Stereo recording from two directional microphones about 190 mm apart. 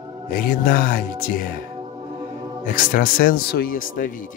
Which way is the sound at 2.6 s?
45° left (ahead or behind).